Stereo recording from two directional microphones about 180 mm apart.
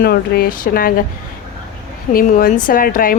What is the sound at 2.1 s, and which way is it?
Speech, 55° left (ahead or behind).